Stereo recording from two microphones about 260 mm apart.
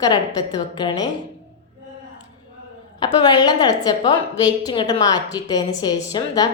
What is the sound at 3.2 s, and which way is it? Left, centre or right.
A woman's voice, centre.